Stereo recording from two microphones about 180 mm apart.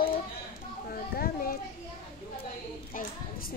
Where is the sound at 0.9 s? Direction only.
55° left (ahead or behind).